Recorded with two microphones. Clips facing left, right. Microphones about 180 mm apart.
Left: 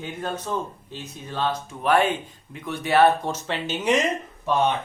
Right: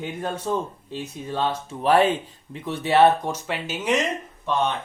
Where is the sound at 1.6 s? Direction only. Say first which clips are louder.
Right 3 dB; 35° right (ahead or behind).